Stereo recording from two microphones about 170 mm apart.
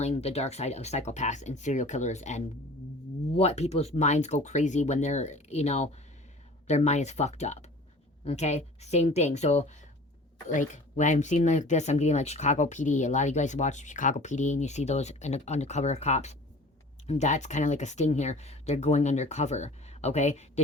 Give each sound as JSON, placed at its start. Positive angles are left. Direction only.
{"t": 0.0, "sound": "speech", "side_deg": 40}